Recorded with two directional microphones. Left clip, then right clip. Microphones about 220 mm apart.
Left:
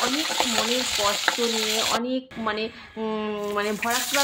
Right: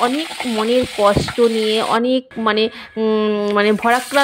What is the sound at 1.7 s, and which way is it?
Speech, 40° right (ahead or behind).